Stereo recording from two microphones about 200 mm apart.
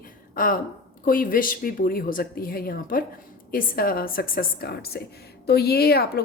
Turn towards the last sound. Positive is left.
turn(degrees=50)  # may be behind; listen again after turning